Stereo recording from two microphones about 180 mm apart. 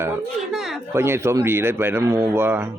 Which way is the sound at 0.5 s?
Centre (ahead or behind).